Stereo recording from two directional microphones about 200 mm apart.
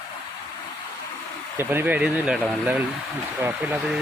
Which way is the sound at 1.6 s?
10° right (ahead or behind).